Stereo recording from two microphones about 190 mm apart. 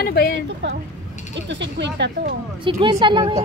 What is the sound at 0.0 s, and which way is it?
Speech, 55° left (ahead or behind).